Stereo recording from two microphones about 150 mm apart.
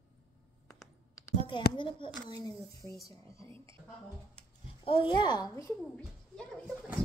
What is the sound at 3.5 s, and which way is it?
Speech, 35° right (ahead or behind).